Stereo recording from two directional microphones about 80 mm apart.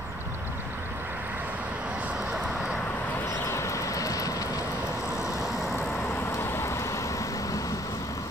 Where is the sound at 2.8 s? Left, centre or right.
Left.